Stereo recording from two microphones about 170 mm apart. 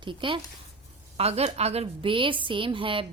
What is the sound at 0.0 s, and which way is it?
A woman's voice, 30° right (ahead or behind).